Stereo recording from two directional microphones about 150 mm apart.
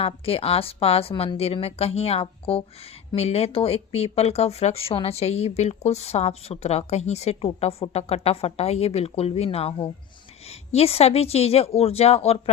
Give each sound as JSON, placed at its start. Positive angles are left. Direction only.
{"t": 0.0, "sound": "a woman's voice", "side_deg": 40}